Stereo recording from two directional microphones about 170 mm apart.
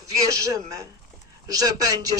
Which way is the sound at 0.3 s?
20° right (ahead or behind).